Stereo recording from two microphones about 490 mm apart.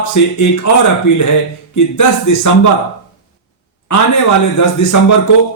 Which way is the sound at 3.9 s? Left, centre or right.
Left.